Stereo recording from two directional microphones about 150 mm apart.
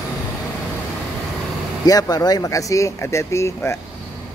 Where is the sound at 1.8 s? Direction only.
25° left (ahead or behind).